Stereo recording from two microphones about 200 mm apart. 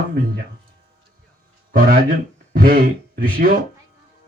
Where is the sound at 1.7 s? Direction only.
45° right (ahead or behind).